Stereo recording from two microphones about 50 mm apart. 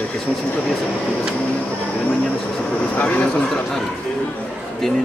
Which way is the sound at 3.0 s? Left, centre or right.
Left.